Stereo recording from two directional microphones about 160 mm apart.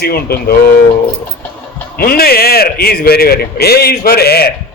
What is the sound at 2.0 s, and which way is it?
A man's voice, 70° left (ahead or behind).